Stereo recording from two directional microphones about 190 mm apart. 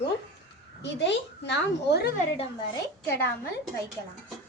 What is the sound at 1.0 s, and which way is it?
Speech, 65° left (ahead or behind).